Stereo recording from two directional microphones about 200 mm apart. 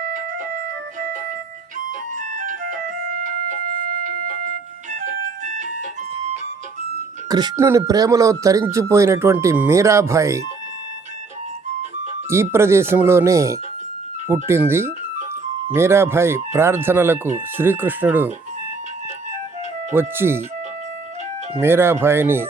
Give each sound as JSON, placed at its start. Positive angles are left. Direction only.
{"t": 0.0, "sound": "music", "side_deg": -45}
{"t": 2.3, "sound": "music", "side_deg": -40}
{"t": 7.3, "sound": "speech", "side_deg": -20}
{"t": 12.3, "sound": "speech", "side_deg": -15}
{"t": 19.9, "sound": "speech", "side_deg": -10}
{"t": 21.6, "sound": "speech", "side_deg": -10}